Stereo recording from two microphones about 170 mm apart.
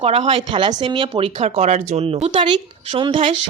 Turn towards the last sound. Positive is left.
turn(degrees=-30)  # may be behind; listen again after turning